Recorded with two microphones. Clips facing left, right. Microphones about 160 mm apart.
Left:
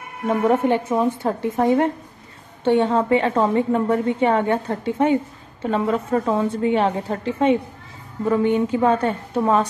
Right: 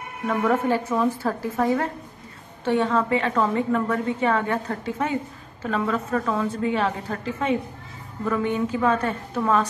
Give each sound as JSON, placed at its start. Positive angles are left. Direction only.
{"t": 0.3, "sound": "a woman's voice", "side_deg": 25}